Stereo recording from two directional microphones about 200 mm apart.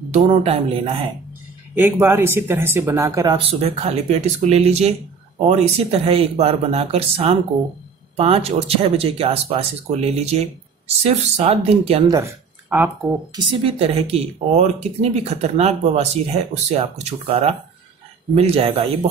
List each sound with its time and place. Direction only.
0.1 s speech: 35° right (ahead or behind)
1.8 s speech: 10° right (ahead or behind)
3.3 s speech: 30° right (ahead or behind)
12.1 s speech: 10° right (ahead or behind)
13.5 s speech: 30° right (ahead or behind)